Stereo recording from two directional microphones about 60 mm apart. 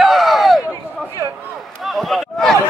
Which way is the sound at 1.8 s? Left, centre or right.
Centre.